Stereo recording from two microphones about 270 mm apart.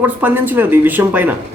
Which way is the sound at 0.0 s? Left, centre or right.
Centre.